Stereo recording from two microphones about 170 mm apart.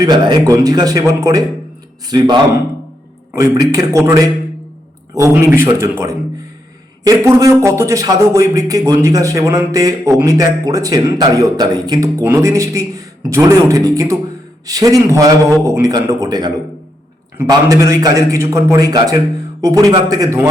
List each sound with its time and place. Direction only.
0.0 s a man's voice: 25° right (ahead or behind)
17.5 s a man's voice: 20° right (ahead or behind)